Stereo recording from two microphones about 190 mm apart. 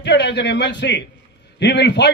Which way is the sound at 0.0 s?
65° left (ahead or behind).